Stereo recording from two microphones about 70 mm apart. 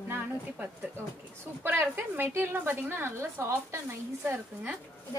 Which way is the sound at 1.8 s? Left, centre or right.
Right.